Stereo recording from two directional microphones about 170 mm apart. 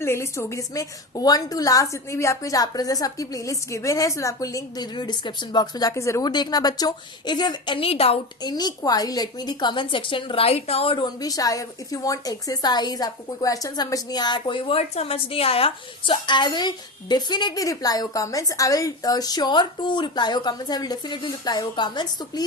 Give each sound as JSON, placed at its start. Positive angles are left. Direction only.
{"t": 0.0, "sound": "a woman's voice", "side_deg": 15}